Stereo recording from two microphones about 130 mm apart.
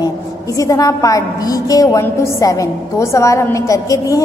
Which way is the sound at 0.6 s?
25° left (ahead or behind).